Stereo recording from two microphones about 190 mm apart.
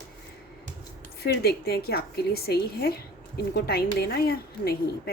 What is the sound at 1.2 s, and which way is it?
Speech, 55° left (ahead or behind).